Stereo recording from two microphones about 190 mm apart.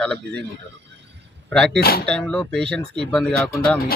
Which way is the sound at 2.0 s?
5° left (ahead or behind).